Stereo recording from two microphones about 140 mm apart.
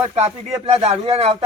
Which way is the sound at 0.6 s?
40° right (ahead or behind).